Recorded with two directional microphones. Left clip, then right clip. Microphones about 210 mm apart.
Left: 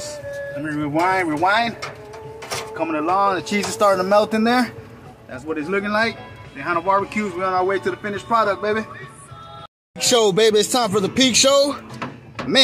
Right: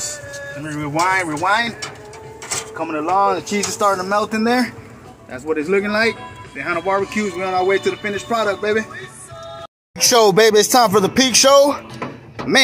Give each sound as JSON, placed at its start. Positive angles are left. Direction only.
{"t": 0.7, "sound": "speech", "side_deg": 15}
{"t": 2.8, "sound": "speech", "side_deg": 10}
{"t": 5.3, "sound": "a man's voice", "side_deg": -10}
{"t": 10.1, "sound": "a man's voice", "side_deg": 0}